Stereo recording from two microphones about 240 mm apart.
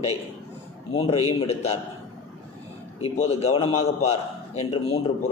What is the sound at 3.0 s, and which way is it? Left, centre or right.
A man's voice, left.